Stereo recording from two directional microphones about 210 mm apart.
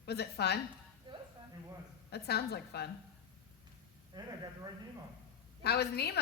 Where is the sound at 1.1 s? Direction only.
20° right (ahead or behind).